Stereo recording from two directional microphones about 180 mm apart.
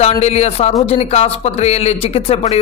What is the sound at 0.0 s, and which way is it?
A man's voice, 35° left (ahead or behind).